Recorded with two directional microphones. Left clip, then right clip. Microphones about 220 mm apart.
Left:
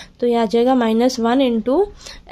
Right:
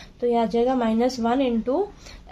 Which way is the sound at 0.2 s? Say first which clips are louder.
Left 5 dB; 45° left (ahead or behind).